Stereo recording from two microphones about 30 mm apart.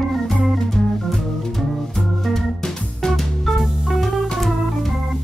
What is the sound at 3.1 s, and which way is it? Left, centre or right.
Music, centre.